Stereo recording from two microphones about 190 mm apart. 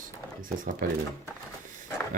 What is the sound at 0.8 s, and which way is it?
Speech, 45° right (ahead or behind).